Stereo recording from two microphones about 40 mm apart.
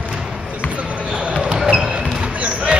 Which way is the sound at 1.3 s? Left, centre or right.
Right.